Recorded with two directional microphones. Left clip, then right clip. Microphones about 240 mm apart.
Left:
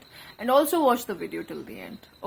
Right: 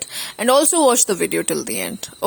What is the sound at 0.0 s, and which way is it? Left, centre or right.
A woman's voice, right.